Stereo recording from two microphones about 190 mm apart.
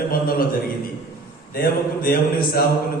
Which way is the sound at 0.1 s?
50° left (ahead or behind).